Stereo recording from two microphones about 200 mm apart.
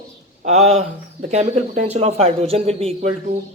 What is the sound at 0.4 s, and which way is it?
Speech, 35° right (ahead or behind).